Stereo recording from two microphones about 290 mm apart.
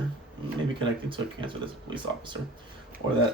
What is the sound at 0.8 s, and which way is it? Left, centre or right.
Speech, centre.